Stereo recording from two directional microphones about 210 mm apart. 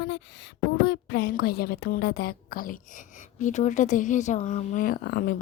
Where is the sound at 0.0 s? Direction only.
60° left (ahead or behind).